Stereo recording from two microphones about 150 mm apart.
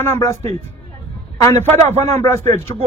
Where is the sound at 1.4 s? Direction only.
20° left (ahead or behind).